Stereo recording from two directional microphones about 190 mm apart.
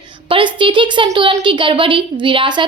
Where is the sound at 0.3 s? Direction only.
25° right (ahead or behind).